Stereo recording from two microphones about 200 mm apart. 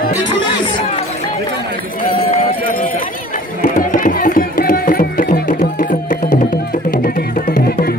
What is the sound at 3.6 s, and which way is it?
Music, 45° left (ahead or behind).